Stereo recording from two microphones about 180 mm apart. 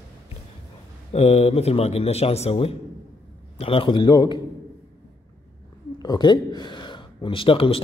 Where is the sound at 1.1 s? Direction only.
35° left (ahead or behind).